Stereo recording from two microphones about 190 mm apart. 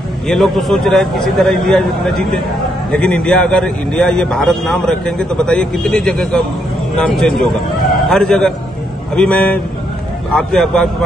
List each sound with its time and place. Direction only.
0.3 s a man's voice: centre (ahead or behind)